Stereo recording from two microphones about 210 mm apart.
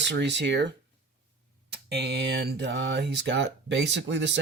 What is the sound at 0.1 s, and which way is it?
Speech, 55° right (ahead or behind).